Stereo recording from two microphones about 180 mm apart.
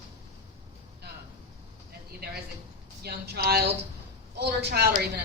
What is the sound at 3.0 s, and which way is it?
A woman's voice, 60° right (ahead or behind).